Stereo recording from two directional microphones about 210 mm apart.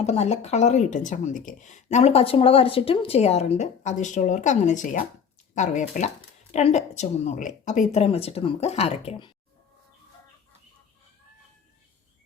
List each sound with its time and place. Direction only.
0.0 s speech: 30° left (ahead or behind)